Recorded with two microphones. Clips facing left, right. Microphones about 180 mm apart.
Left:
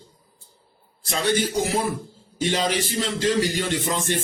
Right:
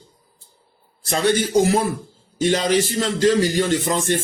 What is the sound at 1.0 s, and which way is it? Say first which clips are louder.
Speech: right 4 dB; 50° right (ahead or behind).